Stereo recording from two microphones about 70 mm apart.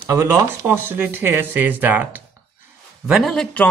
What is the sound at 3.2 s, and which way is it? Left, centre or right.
Speech, centre.